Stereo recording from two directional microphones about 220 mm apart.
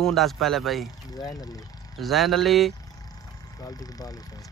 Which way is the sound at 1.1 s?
15° left (ahead or behind).